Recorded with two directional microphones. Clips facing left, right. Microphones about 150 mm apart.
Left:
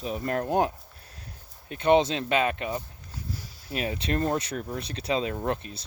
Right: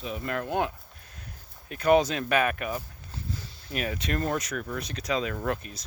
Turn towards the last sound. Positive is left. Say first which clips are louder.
# left 1 dB
turn(degrees=30)  # may be behind; listen again after turning